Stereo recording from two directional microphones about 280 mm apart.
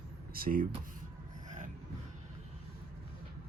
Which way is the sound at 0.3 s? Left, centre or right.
Right.